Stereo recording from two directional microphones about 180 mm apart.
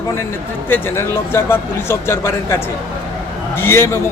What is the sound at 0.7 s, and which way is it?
Speech, 15° left (ahead or behind).